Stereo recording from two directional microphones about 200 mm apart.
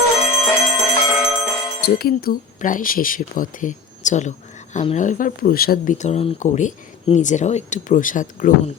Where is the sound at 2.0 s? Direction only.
50° left (ahead or behind).